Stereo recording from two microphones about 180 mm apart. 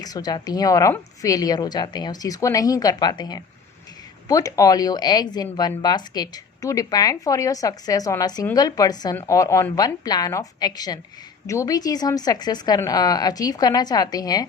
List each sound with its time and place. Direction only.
0.0 s a woman's voice: 20° left (ahead or behind)